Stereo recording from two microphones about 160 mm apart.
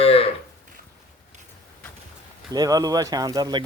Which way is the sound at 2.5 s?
25° right (ahead or behind).